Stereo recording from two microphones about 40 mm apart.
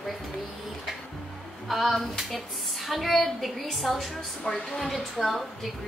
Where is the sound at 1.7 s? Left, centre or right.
Centre.